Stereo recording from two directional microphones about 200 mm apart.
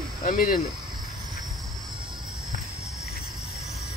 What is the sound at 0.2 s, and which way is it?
Speech, 40° left (ahead or behind).